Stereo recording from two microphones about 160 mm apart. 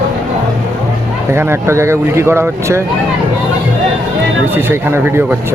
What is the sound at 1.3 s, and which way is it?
Speech, 15° right (ahead or behind).